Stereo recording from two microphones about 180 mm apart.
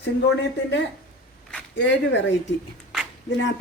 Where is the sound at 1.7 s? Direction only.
80° left.